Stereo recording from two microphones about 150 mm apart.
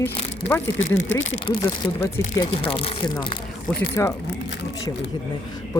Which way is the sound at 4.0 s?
20° left (ahead or behind).